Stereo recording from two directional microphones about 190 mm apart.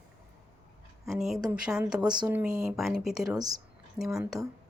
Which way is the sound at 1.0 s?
Centre (ahead or behind).